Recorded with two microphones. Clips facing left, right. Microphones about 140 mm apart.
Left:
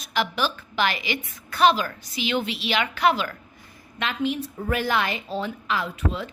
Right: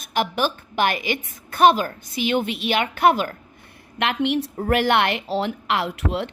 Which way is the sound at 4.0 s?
70° right (ahead or behind).